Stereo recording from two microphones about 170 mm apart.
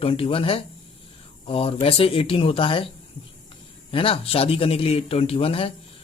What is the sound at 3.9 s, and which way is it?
Speech, 35° left (ahead or behind).